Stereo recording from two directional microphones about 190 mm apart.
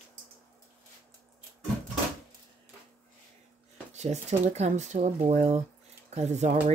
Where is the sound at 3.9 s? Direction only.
35° right (ahead or behind).